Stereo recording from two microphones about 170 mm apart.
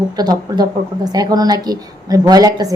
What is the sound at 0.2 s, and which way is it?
A woman's voice, 25° right (ahead or behind).